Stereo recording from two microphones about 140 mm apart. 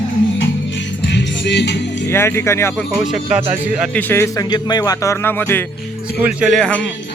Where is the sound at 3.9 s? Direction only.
15° left (ahead or behind).